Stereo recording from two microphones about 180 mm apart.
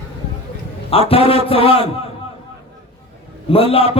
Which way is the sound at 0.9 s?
30° left (ahead or behind).